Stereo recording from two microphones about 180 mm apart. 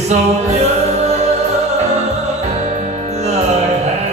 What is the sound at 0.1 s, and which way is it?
Choir, 40° right (ahead or behind).